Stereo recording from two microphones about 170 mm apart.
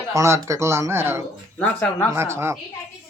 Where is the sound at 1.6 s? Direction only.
10° left (ahead or behind).